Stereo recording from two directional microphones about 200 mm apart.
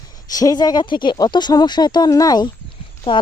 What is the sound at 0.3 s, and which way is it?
Speech, 20° left (ahead or behind).